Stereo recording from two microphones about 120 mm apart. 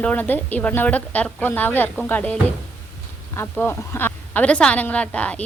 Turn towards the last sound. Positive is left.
turn(degrees=10)  # may be behind; listen again after turning